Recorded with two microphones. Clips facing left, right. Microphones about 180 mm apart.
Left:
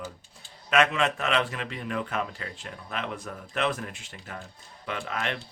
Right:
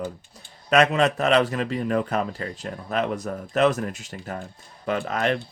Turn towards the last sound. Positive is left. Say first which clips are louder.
# right 8 dB
turn(degrees=-40)  # may be behind; listen again after turning